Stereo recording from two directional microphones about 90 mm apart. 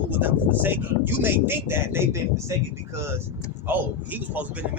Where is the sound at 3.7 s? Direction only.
20° right (ahead or behind).